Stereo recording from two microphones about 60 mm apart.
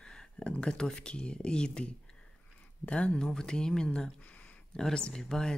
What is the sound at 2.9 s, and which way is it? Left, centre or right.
Speech, centre.